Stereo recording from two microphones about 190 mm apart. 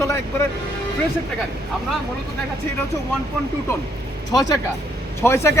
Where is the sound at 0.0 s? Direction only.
15° left (ahead or behind).